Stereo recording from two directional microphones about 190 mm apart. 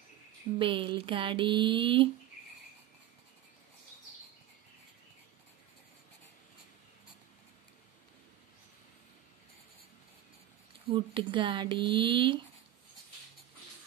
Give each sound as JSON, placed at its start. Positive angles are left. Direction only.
{"t": 0.6, "sound": "speech", "side_deg": -25}
{"t": 10.9, "sound": "speech", "side_deg": -25}